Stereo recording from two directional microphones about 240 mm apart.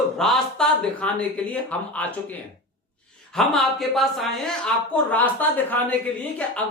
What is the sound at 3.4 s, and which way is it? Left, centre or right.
Speech, centre.